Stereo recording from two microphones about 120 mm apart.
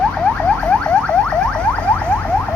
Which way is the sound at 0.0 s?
10° left (ahead or behind).